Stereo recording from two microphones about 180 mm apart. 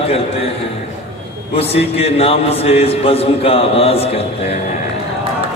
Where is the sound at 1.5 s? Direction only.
35° left (ahead or behind).